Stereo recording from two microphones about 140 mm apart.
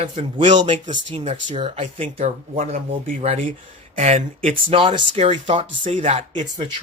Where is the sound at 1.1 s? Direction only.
40° right (ahead or behind).